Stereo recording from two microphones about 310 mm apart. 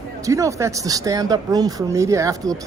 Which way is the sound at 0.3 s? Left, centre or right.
Centre.